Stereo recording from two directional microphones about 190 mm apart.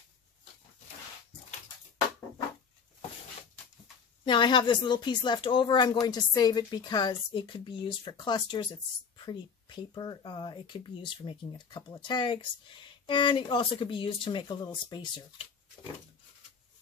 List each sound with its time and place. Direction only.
4.2 s speech: 25° left (ahead or behind)